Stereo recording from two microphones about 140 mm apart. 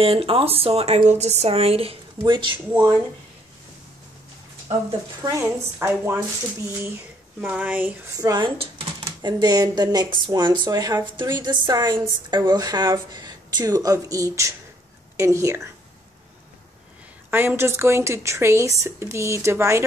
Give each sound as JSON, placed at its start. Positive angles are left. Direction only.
{"t": 0.0, "sound": "a woman's voice", "side_deg": -40}
{"t": 5.2, "sound": "speech", "side_deg": -20}
{"t": 7.3, "sound": "speech", "side_deg": -10}
{"t": 8.1, "sound": "speech", "side_deg": -25}
{"t": 8.5, "sound": "speech", "side_deg": -40}
{"t": 17.3, "sound": "speech", "side_deg": -15}